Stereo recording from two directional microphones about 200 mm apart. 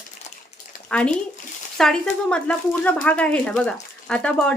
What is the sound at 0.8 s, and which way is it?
A woman's voice, 5° left (ahead or behind).